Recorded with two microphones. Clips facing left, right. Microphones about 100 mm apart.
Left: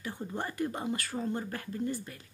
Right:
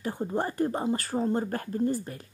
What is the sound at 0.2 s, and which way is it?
A woman's voice, 35° right (ahead or behind).